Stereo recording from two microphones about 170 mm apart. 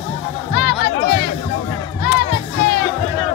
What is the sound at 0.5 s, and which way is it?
Music, 90° left.